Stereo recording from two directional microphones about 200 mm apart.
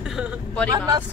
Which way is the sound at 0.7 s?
20° right (ahead or behind).